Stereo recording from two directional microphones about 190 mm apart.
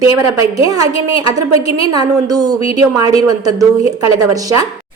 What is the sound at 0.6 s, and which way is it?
A woman's voice, 20° right (ahead or behind).